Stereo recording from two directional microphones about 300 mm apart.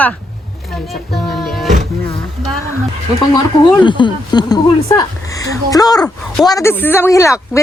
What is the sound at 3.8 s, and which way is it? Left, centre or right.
A woman's voice, centre.